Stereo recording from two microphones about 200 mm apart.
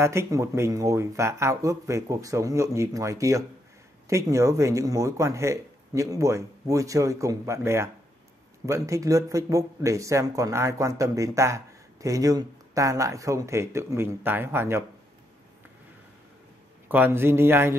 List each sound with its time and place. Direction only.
0.0 s speech: 15° right (ahead or behind)
16.9 s speech: 10° right (ahead or behind)